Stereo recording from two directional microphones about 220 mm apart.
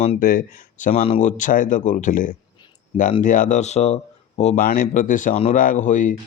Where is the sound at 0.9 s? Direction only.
25° left (ahead or behind).